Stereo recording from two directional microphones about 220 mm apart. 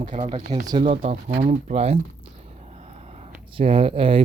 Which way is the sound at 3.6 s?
25° right (ahead or behind).